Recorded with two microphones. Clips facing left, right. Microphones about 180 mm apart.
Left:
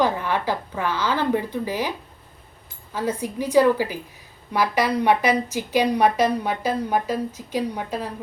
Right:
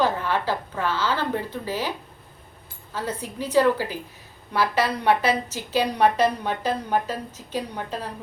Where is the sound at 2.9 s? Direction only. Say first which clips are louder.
Left 4 dB; 15° left (ahead or behind).